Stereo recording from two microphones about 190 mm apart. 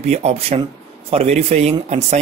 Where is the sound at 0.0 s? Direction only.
35° right (ahead or behind).